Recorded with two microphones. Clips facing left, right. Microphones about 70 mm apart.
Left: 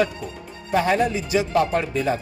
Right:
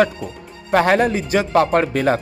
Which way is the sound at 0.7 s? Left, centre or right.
Right.